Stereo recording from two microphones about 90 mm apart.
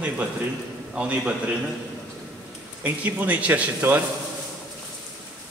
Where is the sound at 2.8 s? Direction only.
20° right (ahead or behind).